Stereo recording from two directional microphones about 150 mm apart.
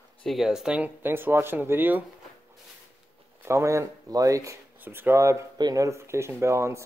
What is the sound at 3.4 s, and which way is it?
Speech, 20° right (ahead or behind).